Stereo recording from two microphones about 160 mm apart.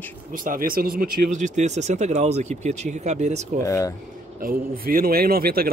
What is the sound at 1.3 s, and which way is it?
Speech, 50° right (ahead or behind).